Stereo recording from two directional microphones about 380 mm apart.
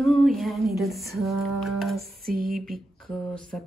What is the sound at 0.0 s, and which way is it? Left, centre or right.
Music, centre.